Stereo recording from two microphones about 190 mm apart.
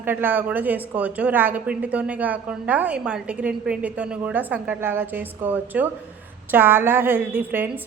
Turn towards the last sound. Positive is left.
turn(degrees=-10)  # may be behind; listen again after turning